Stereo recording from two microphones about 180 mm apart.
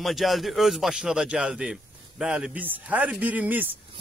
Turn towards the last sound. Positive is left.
turn(degrees=-10)  # may be behind; listen again after turning